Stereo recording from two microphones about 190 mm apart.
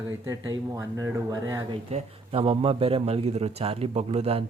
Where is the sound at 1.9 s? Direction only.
30° right (ahead or behind).